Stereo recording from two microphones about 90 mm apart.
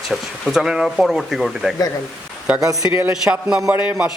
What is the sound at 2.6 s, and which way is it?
Speech, 40° right (ahead or behind).